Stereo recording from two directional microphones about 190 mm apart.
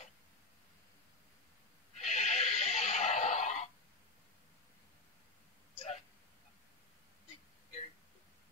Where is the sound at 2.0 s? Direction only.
35° left (ahead or behind).